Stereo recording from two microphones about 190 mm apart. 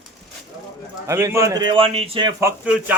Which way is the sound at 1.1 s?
15° right (ahead or behind).